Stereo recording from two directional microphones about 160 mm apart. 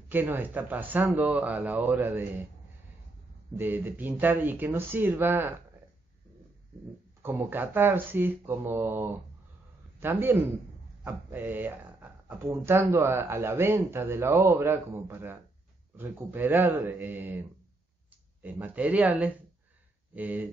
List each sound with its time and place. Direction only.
0.1 s speech: 10° right (ahead or behind)
3.5 s speech: 10° right (ahead or behind)
7.2 s a man's voice: 15° right (ahead or behind)
18.4 s speech: 10° right (ahead or behind)